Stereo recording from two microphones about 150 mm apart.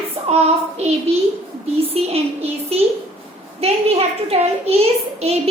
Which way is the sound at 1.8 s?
40° right (ahead or behind).